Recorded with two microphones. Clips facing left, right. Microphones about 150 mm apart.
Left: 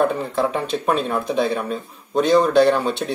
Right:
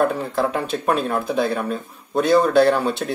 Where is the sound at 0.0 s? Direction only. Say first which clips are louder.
Even; centre (ahead or behind).